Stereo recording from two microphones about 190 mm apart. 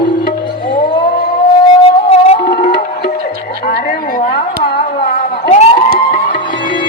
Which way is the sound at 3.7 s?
50° left (ahead or behind).